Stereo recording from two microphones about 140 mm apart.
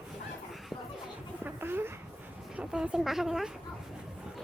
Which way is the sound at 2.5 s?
5° right (ahead or behind).